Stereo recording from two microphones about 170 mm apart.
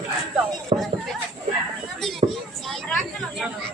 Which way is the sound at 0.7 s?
35° right (ahead or behind).